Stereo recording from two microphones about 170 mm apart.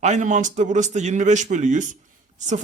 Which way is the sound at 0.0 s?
45° right (ahead or behind).